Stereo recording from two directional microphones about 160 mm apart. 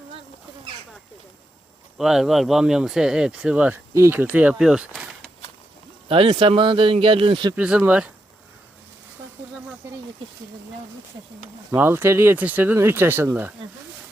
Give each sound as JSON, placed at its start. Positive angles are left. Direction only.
{"t": 2.0, "sound": "speech", "side_deg": -5}
{"t": 6.1, "sound": "a man's voice", "side_deg": -35}
{"t": 7.5, "sound": "speech", "side_deg": -10}
{"t": 11.7, "sound": "speech", "side_deg": -15}